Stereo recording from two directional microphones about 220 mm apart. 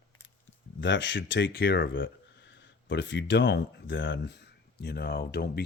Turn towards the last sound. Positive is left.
turn(degrees=45)  # may be behind; listen again after turning